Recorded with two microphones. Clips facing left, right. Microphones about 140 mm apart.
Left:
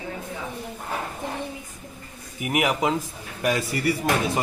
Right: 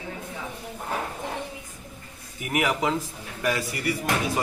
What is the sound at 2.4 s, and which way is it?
A man's voice, 15° left (ahead or behind).